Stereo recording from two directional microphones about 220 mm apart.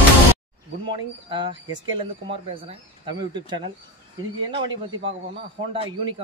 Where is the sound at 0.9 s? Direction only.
20° right (ahead or behind).